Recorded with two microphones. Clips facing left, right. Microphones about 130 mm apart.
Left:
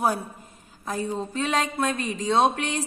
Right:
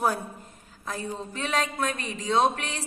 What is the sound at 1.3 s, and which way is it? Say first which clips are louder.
Speech: left 1 dB; 20° left (ahead or behind).